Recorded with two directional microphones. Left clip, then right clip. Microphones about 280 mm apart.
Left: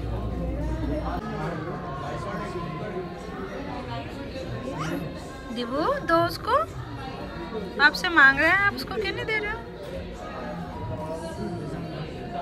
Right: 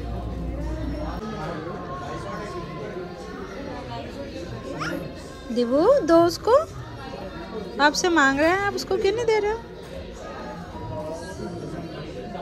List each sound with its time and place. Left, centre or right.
5.6 s a woman's voice: right
7.9 s a woman's voice: right